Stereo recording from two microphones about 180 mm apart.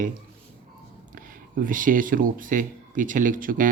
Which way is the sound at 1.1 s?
50° right (ahead or behind).